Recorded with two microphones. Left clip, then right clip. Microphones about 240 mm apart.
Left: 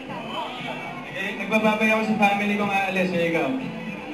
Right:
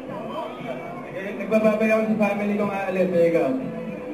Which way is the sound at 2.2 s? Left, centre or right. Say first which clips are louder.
Left 2 dB; centre.